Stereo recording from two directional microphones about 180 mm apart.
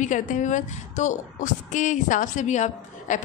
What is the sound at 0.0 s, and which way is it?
A woman's voice, 45° left (ahead or behind).